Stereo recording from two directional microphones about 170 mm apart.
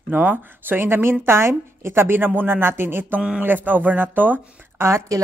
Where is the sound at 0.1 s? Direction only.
10° right (ahead or behind).